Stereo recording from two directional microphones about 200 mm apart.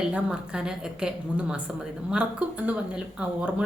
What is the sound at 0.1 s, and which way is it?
A woman's voice, 5° right (ahead or behind).